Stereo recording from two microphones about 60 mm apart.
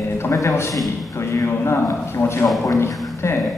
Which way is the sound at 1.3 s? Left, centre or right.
Left.